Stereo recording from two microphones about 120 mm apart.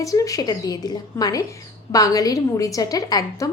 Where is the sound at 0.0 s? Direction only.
30° left (ahead or behind).